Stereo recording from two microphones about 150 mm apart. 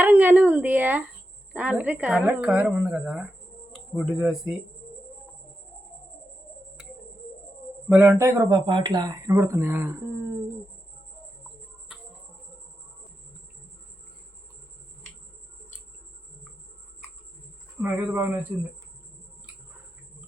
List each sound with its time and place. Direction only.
0.0 s a woman's voice: 15° right (ahead or behind)
3.7 s insect: centre (ahead or behind)
4.2 s speech: centre (ahead or behind)
7.9 s speech: 15° right (ahead or behind)
17.7 s a woman's voice: 10° right (ahead or behind)